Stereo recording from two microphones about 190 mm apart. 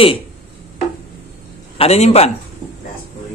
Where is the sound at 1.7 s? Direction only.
30° left (ahead or behind).